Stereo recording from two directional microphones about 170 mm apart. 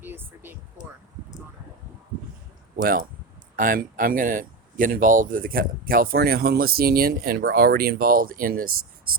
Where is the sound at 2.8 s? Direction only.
60° right (ahead or behind).